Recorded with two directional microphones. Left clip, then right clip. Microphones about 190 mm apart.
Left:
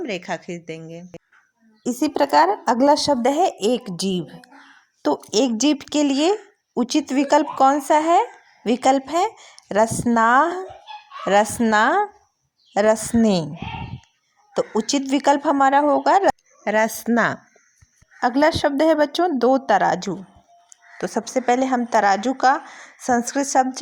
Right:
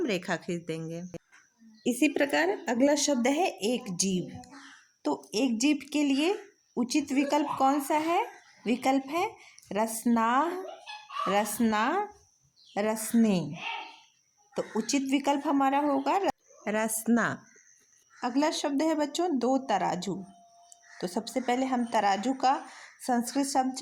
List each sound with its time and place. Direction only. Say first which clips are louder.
0.0 s a woman's voice: left 4 dB; 5° left (ahead or behind)
1.9 s a woman's voice: left 4 dB; 70° left (ahead or behind)
2.7 s a woman's voice: left 8 dB; 5° left (ahead or behind)
3.3 s a woman's voice: left 9 dB; 30° left (ahead or behind)
14.5 s a woman's voice: left 9 dB; 30° left (ahead or behind)